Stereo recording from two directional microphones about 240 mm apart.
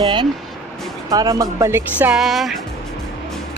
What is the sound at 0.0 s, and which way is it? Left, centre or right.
Speech, centre.